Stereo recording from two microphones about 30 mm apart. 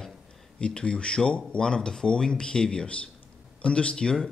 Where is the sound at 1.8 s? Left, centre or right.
Centre.